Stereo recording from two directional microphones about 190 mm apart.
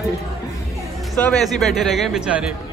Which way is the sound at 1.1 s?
5° left (ahead or behind).